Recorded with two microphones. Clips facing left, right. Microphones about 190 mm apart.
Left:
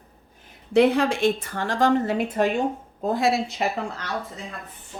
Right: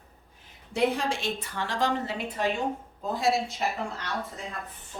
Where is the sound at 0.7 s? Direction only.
65° left (ahead or behind).